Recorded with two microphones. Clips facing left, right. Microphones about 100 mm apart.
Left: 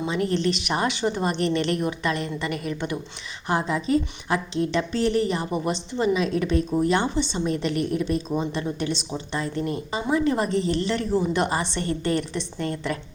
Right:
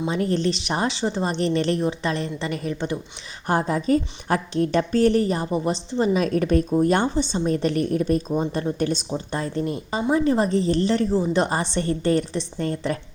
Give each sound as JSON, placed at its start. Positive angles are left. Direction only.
{"t": 0.1, "sound": "a woman's voice", "side_deg": -35}
{"t": 3.4, "sound": "a woman's voice", "side_deg": -45}